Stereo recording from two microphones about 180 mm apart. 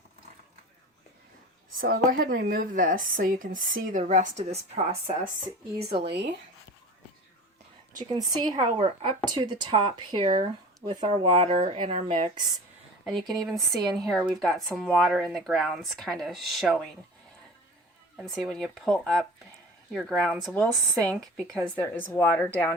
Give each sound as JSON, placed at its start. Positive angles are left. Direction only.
{"t": 1.9, "sound": "speech", "side_deg": -55}
{"t": 5.8, "sound": "speech", "side_deg": -65}
{"t": 8.1, "sound": "speech", "side_deg": -25}
{"t": 13.1, "sound": "speech", "side_deg": 0}
{"t": 13.7, "sound": "speech", "side_deg": -20}
{"t": 14.1, "sound": "speech", "side_deg": 0}
{"t": 18.2, "sound": "speech", "side_deg": 0}
{"t": 21.5, "sound": "a woman's voice", "side_deg": 10}